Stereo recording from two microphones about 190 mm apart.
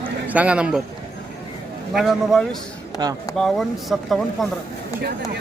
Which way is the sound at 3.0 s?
20° right (ahead or behind).